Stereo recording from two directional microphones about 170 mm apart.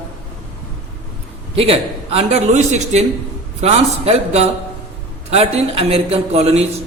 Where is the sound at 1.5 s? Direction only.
35° right (ahead or behind).